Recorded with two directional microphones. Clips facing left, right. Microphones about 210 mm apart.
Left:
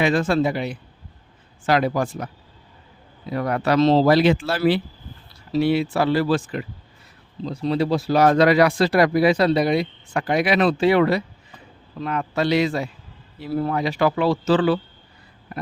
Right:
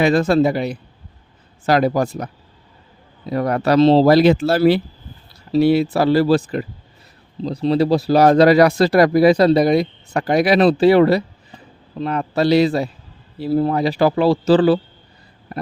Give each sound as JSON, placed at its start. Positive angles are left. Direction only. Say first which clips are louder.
{"t": 0.0, "sound": "speech", "louder": "right 5 dB", "side_deg": -40}